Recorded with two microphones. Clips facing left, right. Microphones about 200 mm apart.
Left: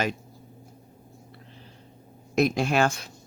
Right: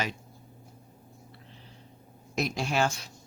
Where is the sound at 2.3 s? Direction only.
55° left (ahead or behind).